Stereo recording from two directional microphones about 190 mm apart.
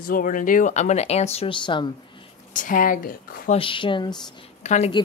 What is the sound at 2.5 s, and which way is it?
Speech, 45° left (ahead or behind).